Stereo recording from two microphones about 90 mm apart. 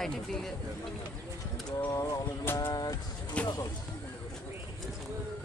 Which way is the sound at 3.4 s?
15° left (ahead or behind).